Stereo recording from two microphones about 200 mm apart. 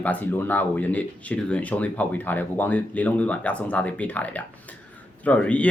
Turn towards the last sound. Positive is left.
turn(degrees=5)  # may be behind; listen again after turning